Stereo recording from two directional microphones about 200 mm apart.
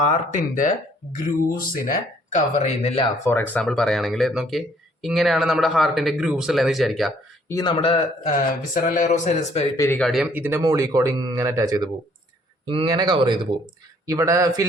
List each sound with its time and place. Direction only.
0.0 s speech: 35° left (ahead or behind)
3.2 s speech: 10° left (ahead or behind)
7.4 s speech: 20° left (ahead or behind)
8.7 s speech: 40° left (ahead or behind)
9.7 s speech: 15° left (ahead or behind)
10.0 s speech: centre (ahead or behind); by 14.6 s 15° right (ahead or behind)